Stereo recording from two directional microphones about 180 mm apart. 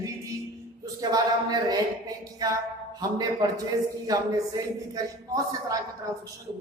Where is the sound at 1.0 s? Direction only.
20° right (ahead or behind).